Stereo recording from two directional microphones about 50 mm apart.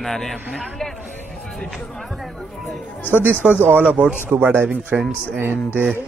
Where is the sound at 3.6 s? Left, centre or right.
Right.